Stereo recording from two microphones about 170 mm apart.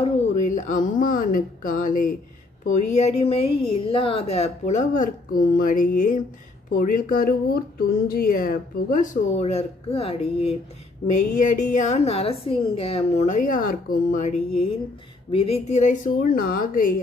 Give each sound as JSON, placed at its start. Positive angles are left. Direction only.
{"t": 0.0, "sound": "a woman's voice", "side_deg": 45}
{"t": 11.1, "sound": "a woman's voice", "side_deg": 45}